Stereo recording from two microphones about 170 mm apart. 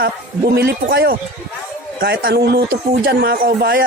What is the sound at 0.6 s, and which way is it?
A man's voice, 75° right (ahead or behind).